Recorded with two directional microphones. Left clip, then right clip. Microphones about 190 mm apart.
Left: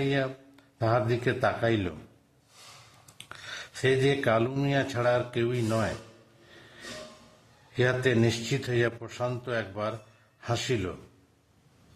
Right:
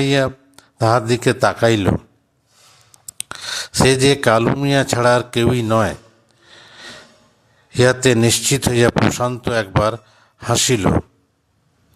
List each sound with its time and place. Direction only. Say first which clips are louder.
0.0 s a man's voice: right 12 dB; 40° right (ahead or behind)
3.2 s speech: right 14 dB; 35° right (ahead or behind)
7.8 s speech: right 11 dB; 35° right (ahead or behind)